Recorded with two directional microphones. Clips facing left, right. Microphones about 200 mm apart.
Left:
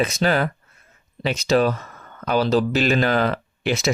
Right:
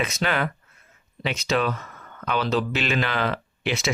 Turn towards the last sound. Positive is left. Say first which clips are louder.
# left 4 dB
turn(degrees=40)  # may be behind; listen again after turning